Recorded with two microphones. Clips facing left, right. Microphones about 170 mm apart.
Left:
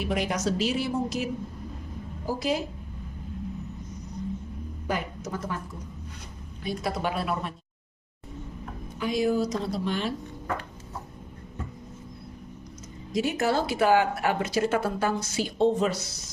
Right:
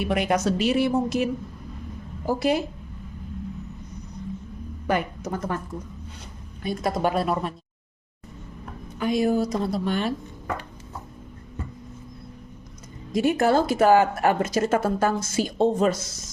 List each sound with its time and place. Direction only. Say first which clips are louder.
0.0 s a woman's voice: right 5 dB; 60° right (ahead or behind)
4.9 s a woman's voice: right 6 dB; 60° right (ahead or behind)
6.8 s speech: right 6 dB; 45° right (ahead or behind)
9.0 s speech: right 3 dB; 50° right (ahead or behind)
13.1 s speech: right 5 dB; 50° right (ahead or behind)